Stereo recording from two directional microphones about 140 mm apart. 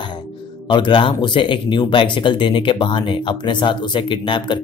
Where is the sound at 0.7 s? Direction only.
35° left (ahead or behind).